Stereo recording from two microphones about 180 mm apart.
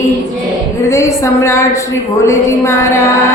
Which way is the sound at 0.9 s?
15° left (ahead or behind).